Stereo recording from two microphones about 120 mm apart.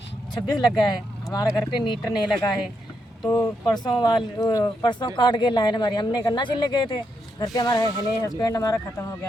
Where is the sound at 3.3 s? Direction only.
25° left (ahead or behind).